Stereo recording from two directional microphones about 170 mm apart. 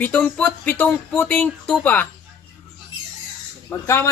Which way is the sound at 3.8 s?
15° left (ahead or behind).